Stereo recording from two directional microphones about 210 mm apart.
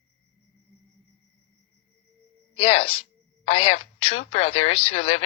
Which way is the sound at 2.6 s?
25° left (ahead or behind).